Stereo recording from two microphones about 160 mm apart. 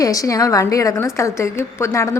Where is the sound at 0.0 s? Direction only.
20° left (ahead or behind).